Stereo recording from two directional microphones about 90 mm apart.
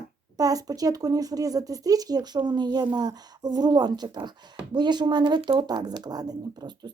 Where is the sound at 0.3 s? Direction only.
45° right (ahead or behind).